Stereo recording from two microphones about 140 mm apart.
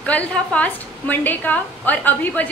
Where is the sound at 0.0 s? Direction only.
10° left (ahead or behind).